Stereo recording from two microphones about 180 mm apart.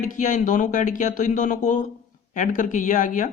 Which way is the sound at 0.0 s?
45° left (ahead or behind).